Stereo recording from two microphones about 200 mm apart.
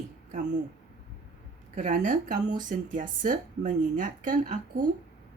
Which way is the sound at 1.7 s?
40° right (ahead or behind).